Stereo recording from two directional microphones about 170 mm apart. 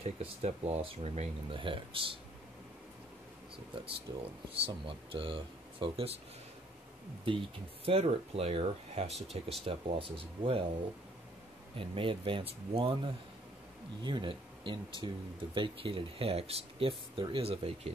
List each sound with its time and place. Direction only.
0.0 s speech: 40° right (ahead or behind)
4.1 s speech: 25° right (ahead or behind)
7.8 s speech: 35° right (ahead or behind)
11.7 s speech: 30° right (ahead or behind)